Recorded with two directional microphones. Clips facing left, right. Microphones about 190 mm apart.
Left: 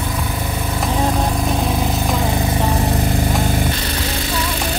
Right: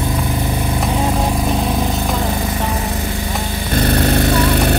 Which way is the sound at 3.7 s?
55° right (ahead or behind).